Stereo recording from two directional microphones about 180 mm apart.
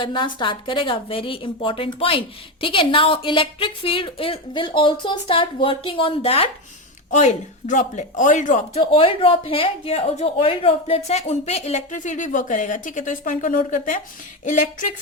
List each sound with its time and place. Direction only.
0.0 s a woman's voice: 25° left (ahead or behind); by 14.8 s 45° left (ahead or behind)